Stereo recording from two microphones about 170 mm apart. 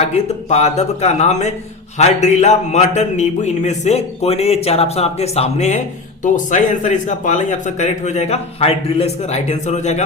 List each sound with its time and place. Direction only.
0.0 s a man's voice: 40° left (ahead or behind)